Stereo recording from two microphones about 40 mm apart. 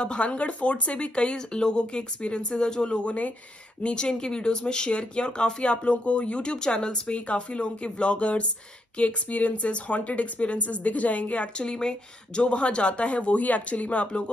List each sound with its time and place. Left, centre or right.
0.0 s a woman's voice: left
11.5 s speech: centre
12.4 s a woman's voice: left